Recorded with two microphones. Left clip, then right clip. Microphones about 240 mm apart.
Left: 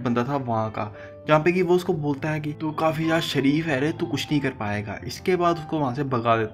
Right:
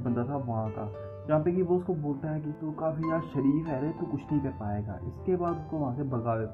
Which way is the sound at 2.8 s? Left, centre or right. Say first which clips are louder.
Left 8 dB; left.